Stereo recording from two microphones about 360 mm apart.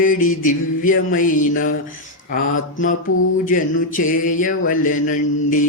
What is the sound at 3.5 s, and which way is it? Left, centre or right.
Mantra, left.